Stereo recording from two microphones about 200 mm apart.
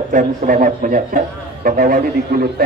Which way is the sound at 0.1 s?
45° right (ahead or behind).